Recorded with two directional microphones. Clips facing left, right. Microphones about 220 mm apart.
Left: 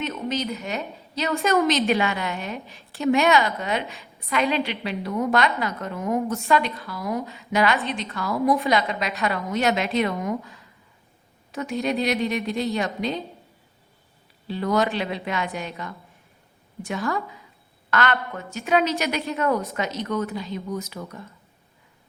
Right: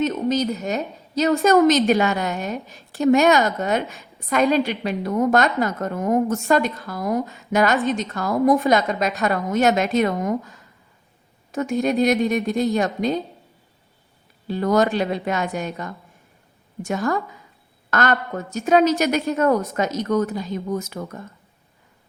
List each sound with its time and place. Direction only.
0.0 s a woman's voice: 40° right (ahead or behind)
14.4 s a woman's voice: 45° right (ahead or behind)